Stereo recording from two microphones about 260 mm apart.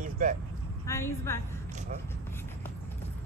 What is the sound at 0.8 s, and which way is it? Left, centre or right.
Speech, centre.